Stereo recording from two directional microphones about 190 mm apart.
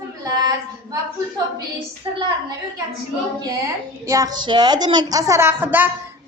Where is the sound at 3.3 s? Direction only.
20° right (ahead or behind).